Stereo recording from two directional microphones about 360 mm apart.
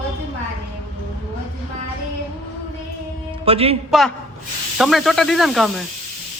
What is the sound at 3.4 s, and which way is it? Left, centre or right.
Speech, centre.